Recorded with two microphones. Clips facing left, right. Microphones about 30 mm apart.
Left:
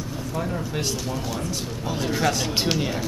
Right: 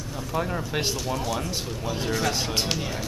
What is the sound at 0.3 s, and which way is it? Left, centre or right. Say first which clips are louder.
Speech: right 2 dB; centre.